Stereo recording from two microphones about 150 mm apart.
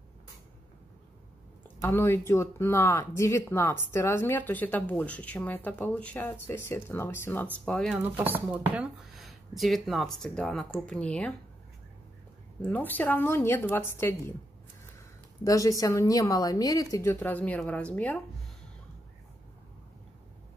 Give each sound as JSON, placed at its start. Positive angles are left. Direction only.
{"t": 1.8, "sound": "speech", "side_deg": 15}
{"t": 8.3, "sound": "speech", "side_deg": -10}
{"t": 12.6, "sound": "speech", "side_deg": 10}
{"t": 15.4, "sound": "a woman's voice", "side_deg": 20}